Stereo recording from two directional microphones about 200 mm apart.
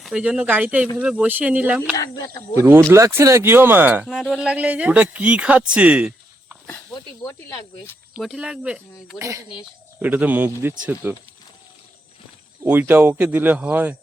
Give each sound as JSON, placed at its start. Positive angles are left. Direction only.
{"t": 0.0, "sound": "speech", "side_deg": -5}
{"t": 2.0, "sound": "speech", "side_deg": 15}
{"t": 2.6, "sound": "speech", "side_deg": -10}
{"t": 6.9, "sound": "speech", "side_deg": 15}
{"t": 8.1, "sound": "speech", "side_deg": 0}
{"t": 12.6, "sound": "speech", "side_deg": -10}